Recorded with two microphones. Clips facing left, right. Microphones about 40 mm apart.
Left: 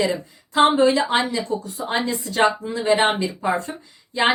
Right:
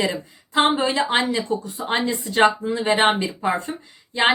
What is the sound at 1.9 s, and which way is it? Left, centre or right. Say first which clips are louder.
A woman's voice: right 1 dB; right.